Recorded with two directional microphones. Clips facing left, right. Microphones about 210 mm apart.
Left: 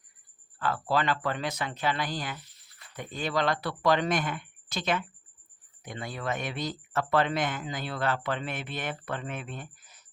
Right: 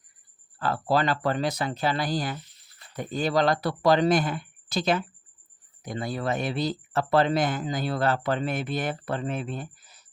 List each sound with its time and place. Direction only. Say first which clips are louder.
0.6 s speech: right 3 dB; 35° right (ahead or behind)